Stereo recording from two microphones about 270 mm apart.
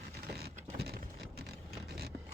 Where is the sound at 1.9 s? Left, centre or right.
Right.